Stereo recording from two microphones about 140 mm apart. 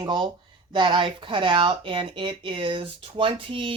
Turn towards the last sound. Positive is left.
turn(degrees=-40)  # may be behind; listen again after turning